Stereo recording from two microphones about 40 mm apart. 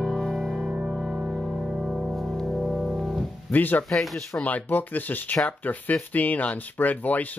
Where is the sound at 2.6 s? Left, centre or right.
Centre.